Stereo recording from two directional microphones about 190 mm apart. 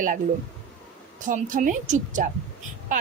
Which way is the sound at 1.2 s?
45° right (ahead or behind).